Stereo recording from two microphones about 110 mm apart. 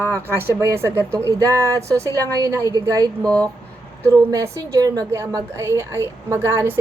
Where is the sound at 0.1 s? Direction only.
25° right (ahead or behind).